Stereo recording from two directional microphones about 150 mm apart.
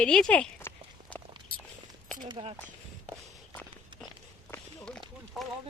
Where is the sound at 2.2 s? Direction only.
35° right (ahead or behind).